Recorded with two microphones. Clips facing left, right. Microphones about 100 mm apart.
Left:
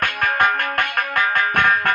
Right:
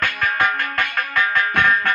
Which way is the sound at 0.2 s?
50° left (ahead or behind).